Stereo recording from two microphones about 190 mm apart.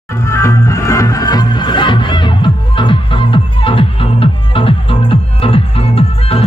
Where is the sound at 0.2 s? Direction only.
15° left (ahead or behind).